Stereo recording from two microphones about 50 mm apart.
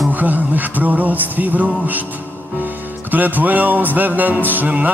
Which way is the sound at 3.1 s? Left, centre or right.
Right.